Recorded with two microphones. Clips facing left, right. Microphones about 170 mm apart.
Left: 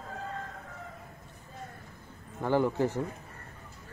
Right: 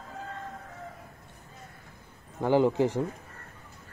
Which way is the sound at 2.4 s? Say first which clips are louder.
Right 4 dB; 20° right (ahead or behind).